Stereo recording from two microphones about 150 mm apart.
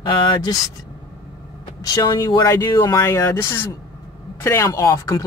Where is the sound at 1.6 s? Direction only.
25° left (ahead or behind).